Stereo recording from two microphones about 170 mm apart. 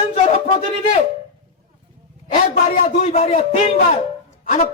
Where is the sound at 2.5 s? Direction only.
40° left (ahead or behind).